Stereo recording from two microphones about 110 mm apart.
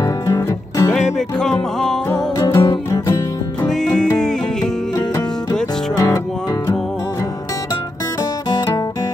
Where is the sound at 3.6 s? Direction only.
5° left (ahead or behind).